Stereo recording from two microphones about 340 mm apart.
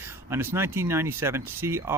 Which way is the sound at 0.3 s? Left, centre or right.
Centre.